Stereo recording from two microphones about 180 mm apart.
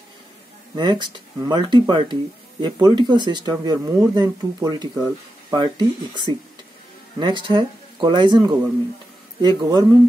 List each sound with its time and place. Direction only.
0.7 s speech: 25° right (ahead or behind)